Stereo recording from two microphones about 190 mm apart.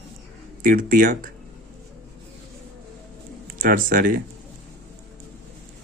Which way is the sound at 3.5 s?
50° right (ahead or behind).